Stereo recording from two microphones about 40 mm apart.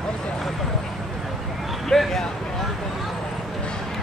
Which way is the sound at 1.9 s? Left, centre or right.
Centre.